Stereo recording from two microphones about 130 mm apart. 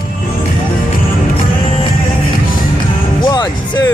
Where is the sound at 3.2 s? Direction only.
35° left (ahead or behind).